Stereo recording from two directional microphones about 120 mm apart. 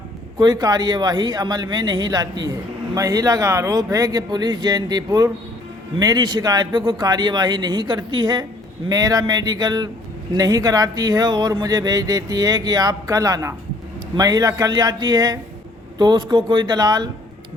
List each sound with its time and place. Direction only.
0.3 s speech: 35° right (ahead or behind)